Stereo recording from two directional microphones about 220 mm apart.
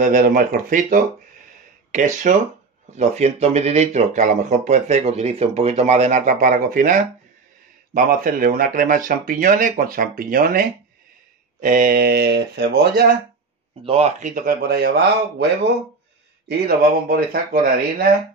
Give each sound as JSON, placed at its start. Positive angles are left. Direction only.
{"t": 0.0, "sound": "speech", "side_deg": -40}
{"t": 13.8, "sound": "speech", "side_deg": -30}
{"t": 16.4, "sound": "speech", "side_deg": -45}